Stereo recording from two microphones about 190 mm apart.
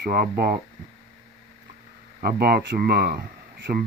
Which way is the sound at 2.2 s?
55° right (ahead or behind).